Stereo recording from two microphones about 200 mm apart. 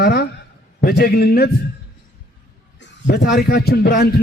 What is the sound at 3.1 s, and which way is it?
A man's voice, 55° left (ahead or behind).